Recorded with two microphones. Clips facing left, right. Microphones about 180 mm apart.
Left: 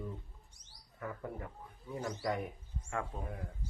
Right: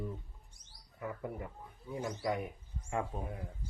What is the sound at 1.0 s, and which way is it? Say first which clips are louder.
Speech: right 2 dB; 10° right (ahead or behind).